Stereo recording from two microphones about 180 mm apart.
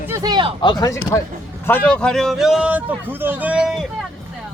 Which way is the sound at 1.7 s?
10° left (ahead or behind).